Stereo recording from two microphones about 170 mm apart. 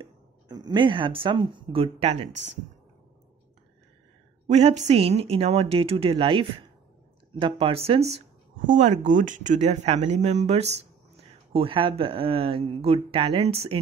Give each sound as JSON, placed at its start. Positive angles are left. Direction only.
{"t": 0.0, "sound": "speech", "side_deg": -25}
{"t": 4.5, "sound": "speech", "side_deg": -40}